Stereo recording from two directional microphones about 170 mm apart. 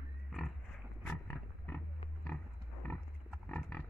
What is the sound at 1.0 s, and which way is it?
Pig, 10° left (ahead or behind).